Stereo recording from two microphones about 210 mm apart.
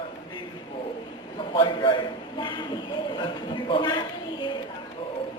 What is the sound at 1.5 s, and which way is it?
Speech, 25° left (ahead or behind).